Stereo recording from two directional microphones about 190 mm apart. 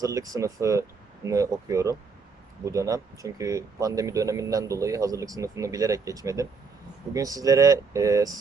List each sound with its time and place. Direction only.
0.0 s speech: 20° right (ahead or behind)